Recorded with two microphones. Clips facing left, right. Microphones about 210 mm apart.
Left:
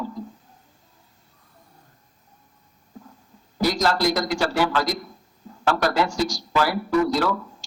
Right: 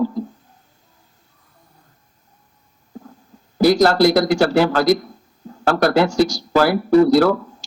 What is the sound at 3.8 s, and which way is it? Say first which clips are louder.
Speech: right 8 dB; 65° right (ahead or behind).